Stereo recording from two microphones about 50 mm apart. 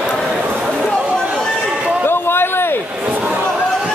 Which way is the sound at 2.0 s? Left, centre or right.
Left.